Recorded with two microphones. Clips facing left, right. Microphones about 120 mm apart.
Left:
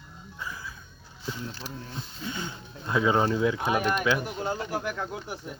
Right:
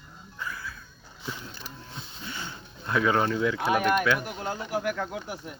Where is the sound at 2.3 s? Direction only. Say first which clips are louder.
Left 3 dB; 20° left (ahead or behind).